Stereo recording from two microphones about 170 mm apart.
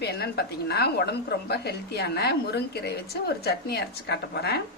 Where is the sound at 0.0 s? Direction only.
70° left (ahead or behind).